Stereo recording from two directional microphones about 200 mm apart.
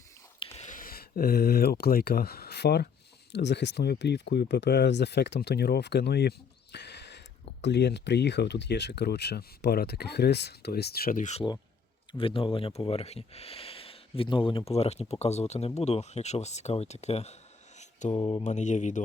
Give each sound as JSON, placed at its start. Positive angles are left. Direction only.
{"t": 0.5, "sound": "speech", "side_deg": 40}
{"t": 12.1, "sound": "speech", "side_deg": 25}
{"t": 18.1, "sound": "mantra", "side_deg": 25}
{"t": 18.4, "sound": "speech", "side_deg": 35}